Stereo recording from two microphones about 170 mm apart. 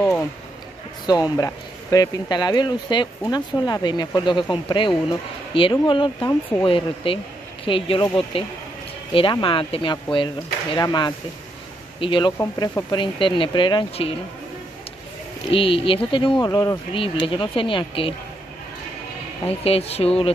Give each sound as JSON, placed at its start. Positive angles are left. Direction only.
{"t": 0.0, "sound": "a sound", "side_deg": 5}
{"t": 1.3, "sound": "speech", "side_deg": 20}
{"t": 12.4, "sound": "speech", "side_deg": 20}
{"t": 15.5, "sound": "speech", "side_deg": 30}
{"t": 19.4, "sound": "speech", "side_deg": 35}